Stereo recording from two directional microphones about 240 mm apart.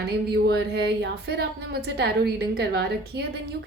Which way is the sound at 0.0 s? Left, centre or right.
Right.